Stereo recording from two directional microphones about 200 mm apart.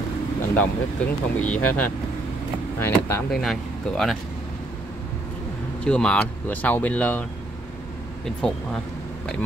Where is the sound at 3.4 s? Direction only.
Centre (ahead or behind).